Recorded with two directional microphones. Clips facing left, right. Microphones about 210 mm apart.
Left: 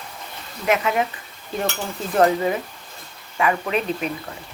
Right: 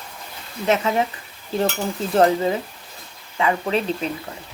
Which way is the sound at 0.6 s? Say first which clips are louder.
Right 1 dB; 30° right (ahead or behind).